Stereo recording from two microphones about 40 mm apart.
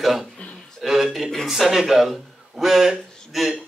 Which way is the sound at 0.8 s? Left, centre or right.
Centre.